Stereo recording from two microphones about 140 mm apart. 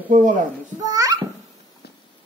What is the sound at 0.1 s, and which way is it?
Speech, 60° right (ahead or behind).